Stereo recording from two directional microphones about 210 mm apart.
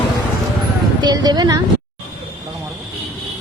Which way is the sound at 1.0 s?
20° right (ahead or behind).